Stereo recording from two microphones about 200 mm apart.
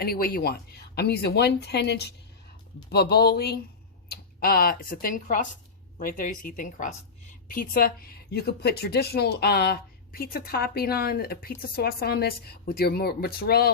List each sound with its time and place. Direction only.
0.0 s a woman's voice: 50° left (ahead or behind)